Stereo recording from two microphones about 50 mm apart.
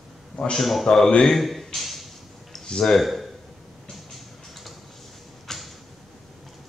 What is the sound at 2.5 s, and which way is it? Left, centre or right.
Speech, centre.